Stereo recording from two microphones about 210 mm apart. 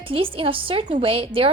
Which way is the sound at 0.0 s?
25° right (ahead or behind).